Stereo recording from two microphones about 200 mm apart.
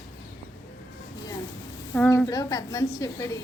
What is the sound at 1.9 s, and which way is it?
Speech, 5° left (ahead or behind).